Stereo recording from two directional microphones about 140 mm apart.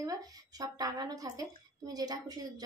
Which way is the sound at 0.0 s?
25° right (ahead or behind).